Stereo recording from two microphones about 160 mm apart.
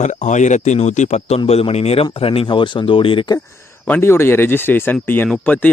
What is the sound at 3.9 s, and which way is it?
Speech, 15° left (ahead or behind).